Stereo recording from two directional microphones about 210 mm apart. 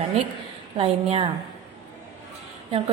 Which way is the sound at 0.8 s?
30° right (ahead or behind).